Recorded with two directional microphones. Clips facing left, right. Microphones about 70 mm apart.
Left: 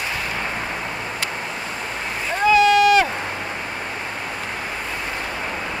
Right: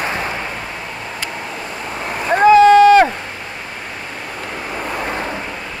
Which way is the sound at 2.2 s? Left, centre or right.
Right.